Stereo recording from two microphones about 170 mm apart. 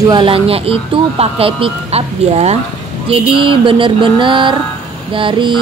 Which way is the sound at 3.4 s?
30° right (ahead or behind).